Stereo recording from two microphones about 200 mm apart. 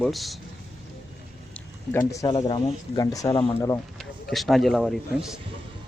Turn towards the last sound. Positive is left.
turn(degrees=0)  # may be behind; listen again after turning